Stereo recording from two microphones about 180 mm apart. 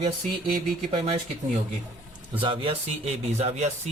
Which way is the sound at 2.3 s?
30° right (ahead or behind).